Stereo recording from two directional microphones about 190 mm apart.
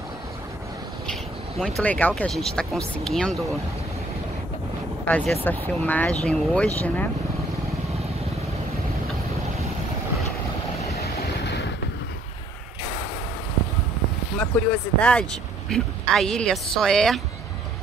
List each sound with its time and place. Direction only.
1.8 s speech: 10° left (ahead or behind)
5.0 s speech: 5° left (ahead or behind)
11.0 s vehicle: 60° left (ahead or behind)
14.4 s speech: 5° left (ahead or behind)